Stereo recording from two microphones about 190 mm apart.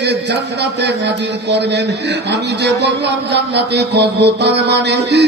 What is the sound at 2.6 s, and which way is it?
Music, 65° right (ahead or behind).